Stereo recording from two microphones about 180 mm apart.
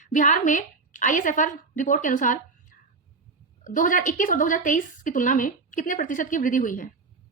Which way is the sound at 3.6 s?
45° left (ahead or behind).